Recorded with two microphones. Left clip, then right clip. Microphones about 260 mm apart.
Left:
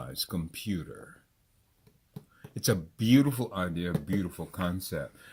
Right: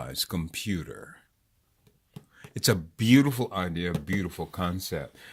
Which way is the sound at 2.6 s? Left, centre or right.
Right.